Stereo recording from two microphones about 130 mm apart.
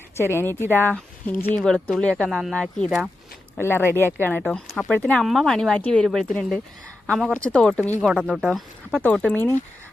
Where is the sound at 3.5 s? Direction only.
15° left (ahead or behind).